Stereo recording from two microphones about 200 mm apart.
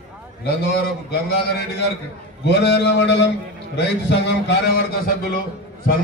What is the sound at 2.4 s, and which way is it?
A man's voice, 60° left (ahead or behind).